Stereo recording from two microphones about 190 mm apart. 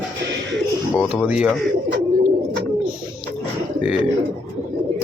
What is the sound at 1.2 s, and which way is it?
Speech, 5° right (ahead or behind).